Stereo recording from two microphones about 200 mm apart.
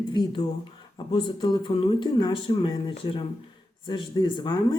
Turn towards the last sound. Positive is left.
turn(degrees=25)  # may be behind; listen again after turning